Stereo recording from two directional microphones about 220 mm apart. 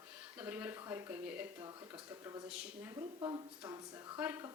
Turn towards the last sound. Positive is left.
turn(degrees=-10)  # may be behind; listen again after turning